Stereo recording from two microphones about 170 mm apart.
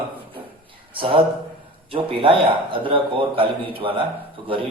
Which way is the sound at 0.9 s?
30° right (ahead or behind).